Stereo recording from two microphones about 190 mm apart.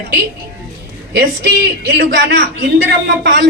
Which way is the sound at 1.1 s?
60° right (ahead or behind).